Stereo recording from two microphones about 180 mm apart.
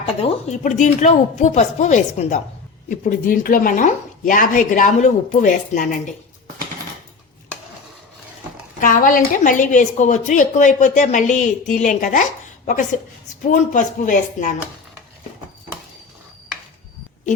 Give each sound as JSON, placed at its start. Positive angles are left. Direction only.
{"t": 0.2, "sound": "a woman's voice", "side_deg": 40}
{"t": 8.8, "sound": "a woman's voice", "side_deg": 50}